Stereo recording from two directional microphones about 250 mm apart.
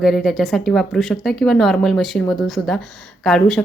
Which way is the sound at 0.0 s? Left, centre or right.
Centre.